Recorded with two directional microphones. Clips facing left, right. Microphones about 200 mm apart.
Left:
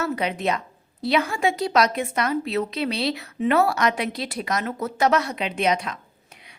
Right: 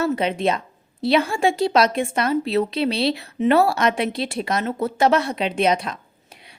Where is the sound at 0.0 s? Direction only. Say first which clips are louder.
Right 4 dB; 25° right (ahead or behind).